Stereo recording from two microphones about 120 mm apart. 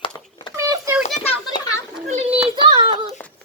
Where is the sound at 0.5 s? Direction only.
25° right (ahead or behind).